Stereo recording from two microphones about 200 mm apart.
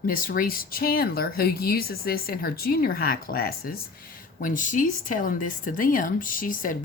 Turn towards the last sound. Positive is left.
turn(degrees=45)  # may be behind; listen again after turning